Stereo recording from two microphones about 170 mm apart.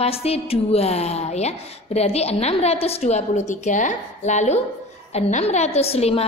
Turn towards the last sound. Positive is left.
turn(degrees=35)  # may be behind; listen again after turning